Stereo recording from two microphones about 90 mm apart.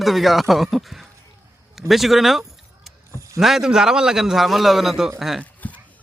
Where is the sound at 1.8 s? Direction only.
Centre (ahead or behind).